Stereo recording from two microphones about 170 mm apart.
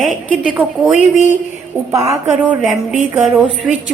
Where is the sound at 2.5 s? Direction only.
5° right (ahead or behind).